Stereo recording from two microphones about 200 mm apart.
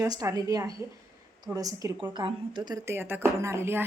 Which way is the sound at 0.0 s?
15° right (ahead or behind).